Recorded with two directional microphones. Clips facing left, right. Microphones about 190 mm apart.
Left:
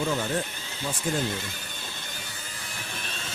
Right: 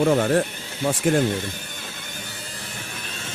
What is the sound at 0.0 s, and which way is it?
Speech, 65° right (ahead or behind).